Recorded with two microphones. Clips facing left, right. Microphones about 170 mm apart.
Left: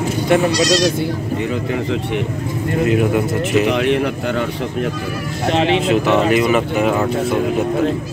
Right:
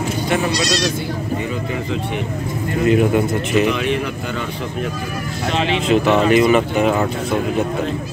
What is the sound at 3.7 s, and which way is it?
Speech, 70° left (ahead or behind).